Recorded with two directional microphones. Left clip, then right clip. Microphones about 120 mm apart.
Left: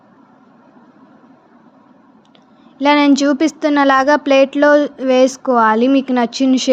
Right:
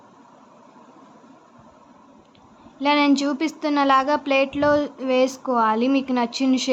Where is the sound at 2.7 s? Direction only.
55° left (ahead or behind).